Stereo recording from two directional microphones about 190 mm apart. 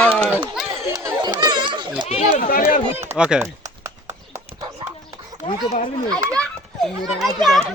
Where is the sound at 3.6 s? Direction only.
15° right (ahead or behind).